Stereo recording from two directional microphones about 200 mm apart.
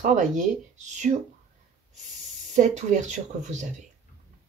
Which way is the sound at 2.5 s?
35° right (ahead or behind).